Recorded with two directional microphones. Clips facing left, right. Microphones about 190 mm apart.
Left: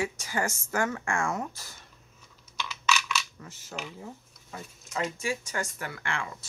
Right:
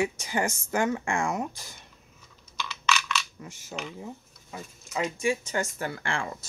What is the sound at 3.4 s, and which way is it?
Speech, 15° right (ahead or behind).